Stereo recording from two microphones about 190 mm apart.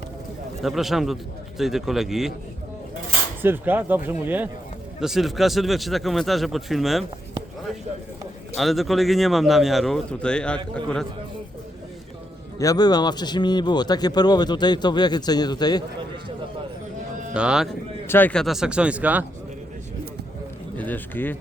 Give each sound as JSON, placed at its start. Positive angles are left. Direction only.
{"t": 0.6, "sound": "speech", "side_deg": 0}
{"t": 3.4, "sound": "speech", "side_deg": -10}
{"t": 8.5, "sound": "speech", "side_deg": 0}
{"t": 12.5, "sound": "speech", "side_deg": 20}
{"t": 17.3, "sound": "speech", "side_deg": -5}
{"t": 18.1, "sound": "speech", "side_deg": 10}
{"t": 20.7, "sound": "speech", "side_deg": 10}